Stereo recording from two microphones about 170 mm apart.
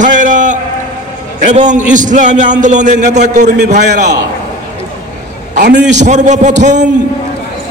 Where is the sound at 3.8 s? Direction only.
75° right (ahead or behind).